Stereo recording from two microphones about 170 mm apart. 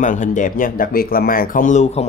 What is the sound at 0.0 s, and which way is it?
Speech, 50° left (ahead or behind).